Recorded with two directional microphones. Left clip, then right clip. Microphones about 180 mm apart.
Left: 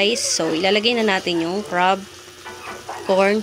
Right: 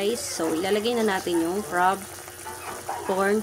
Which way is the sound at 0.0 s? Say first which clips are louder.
Left 7 dB; 15° left (ahead or behind).